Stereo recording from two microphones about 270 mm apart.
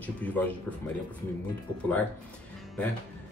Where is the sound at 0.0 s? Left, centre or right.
Centre.